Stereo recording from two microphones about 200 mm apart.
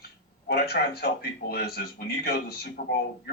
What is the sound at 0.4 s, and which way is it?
Speech, 50° left (ahead or behind).